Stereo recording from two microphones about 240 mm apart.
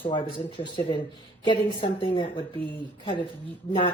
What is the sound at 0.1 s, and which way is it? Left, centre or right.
Speech, centre.